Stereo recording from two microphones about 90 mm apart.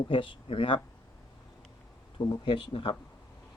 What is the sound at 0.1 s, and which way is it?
Speech, 75° left (ahead or behind).